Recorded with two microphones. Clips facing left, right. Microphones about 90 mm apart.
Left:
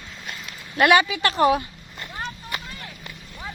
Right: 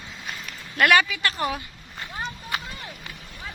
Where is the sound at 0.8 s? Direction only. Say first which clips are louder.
Left 2 dB; 20° left (ahead or behind).